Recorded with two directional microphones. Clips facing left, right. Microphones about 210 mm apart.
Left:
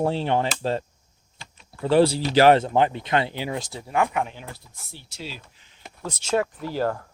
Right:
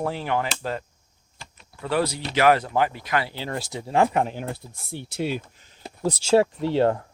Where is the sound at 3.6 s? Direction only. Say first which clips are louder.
Right 5 dB; 20° right (ahead or behind); by 4.4 s 35° right (ahead or behind).